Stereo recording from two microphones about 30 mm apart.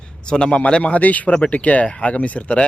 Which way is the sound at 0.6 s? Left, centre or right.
Left.